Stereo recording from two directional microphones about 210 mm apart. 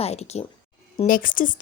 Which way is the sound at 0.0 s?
30° left (ahead or behind).